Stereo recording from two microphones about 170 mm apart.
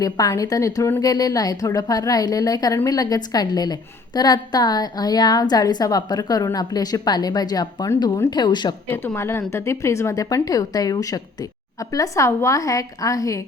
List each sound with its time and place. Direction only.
0.0 s a woman's voice: 20° left (ahead or behind)
8.9 s a woman's voice: 15° left (ahead or behind)